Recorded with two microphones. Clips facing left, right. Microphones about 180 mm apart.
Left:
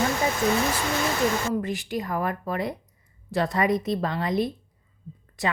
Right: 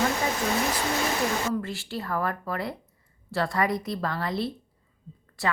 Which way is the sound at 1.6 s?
15° left (ahead or behind).